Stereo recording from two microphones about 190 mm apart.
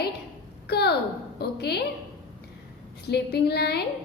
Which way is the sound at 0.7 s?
55° left (ahead or behind).